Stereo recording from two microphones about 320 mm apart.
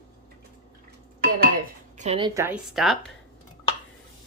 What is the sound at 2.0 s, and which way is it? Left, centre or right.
A woman's voice, centre.